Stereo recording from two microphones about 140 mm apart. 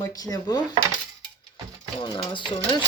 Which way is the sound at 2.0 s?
35° left (ahead or behind).